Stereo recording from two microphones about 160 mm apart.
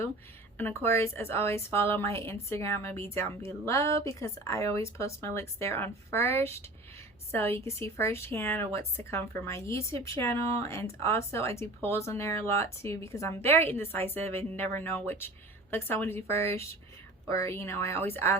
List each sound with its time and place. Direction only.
0.5 s a woman's voice: 15° left (ahead or behind)